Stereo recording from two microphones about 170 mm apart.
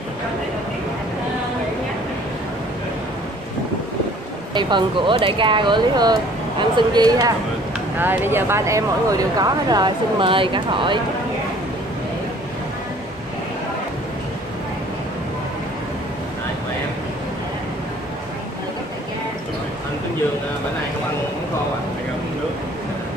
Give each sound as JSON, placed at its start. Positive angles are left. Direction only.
{"t": 4.6, "sound": "speech", "side_deg": -25}